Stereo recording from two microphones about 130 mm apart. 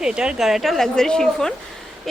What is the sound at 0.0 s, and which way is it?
A woman's voice, 5° right (ahead or behind).